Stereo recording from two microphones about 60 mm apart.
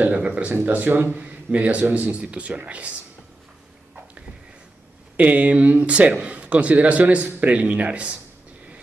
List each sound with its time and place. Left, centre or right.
0.1 s speech: centre
0.5 s speech: right
1.1 s speech: right
5.1 s speech: right